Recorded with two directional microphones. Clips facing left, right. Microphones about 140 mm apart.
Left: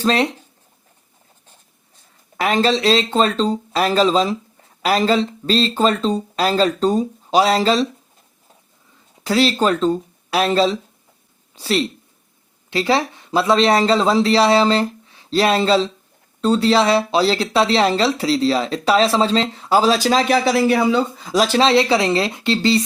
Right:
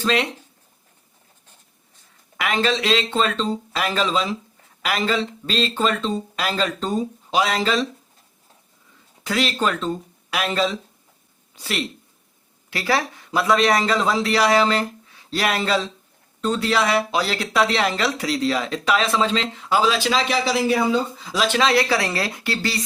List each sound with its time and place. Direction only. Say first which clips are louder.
0.0 s speech: left 4 dB; 35° left (ahead or behind)
2.4 s speech: left 5 dB; 35° left (ahead or behind)
9.2 s speech: left 6 dB; 30° left (ahead or behind); by 21.0 s 70° left (ahead or behind)
21.2 s speech: left 4 dB; 45° left (ahead or behind); by 22.8 s 25° left (ahead or behind)